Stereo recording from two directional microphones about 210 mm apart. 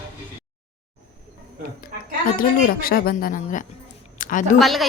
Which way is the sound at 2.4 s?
45° left (ahead or behind).